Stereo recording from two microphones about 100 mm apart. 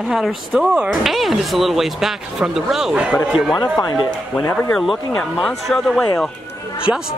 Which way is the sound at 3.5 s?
40° left (ahead or behind).